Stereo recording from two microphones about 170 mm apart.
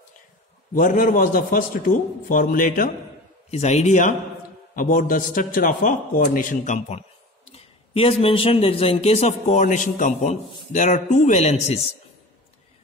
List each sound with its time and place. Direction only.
0.7 s a man's voice: 55° left (ahead or behind)
3.4 s a man's voice: 40° left (ahead or behind)
7.4 s a man's voice: 35° left (ahead or behind)